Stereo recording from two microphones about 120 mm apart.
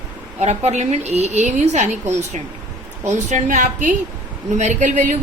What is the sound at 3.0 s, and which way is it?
A woman's voice, 90° right.